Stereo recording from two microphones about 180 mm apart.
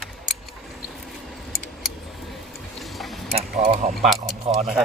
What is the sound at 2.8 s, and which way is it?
Tick-tock, centre (ahead or behind).